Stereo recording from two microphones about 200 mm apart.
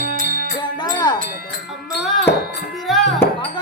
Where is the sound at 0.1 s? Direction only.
45° left (ahead or behind).